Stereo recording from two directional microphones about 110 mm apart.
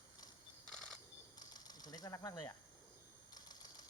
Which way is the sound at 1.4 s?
35° left (ahead or behind).